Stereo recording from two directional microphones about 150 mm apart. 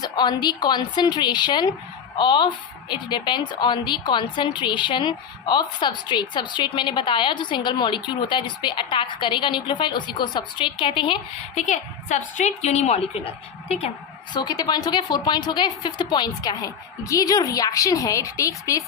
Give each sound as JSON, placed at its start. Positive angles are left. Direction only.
{"t": 0.0, "sound": "a woman's voice", "side_deg": 30}
{"t": 11.5, "sound": "a woman's voice", "side_deg": 55}
{"t": 14.3, "sound": "a woman's voice", "side_deg": 25}